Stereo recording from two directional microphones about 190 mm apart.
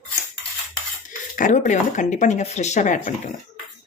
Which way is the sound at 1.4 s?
40° left (ahead or behind).